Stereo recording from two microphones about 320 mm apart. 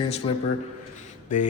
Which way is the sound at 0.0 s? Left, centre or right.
Centre.